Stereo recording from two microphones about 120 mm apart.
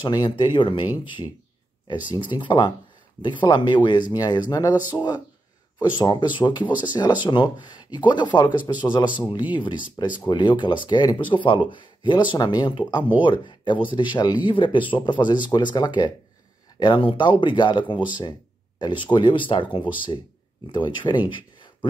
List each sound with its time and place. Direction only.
0.0 s speech: 35° left (ahead or behind)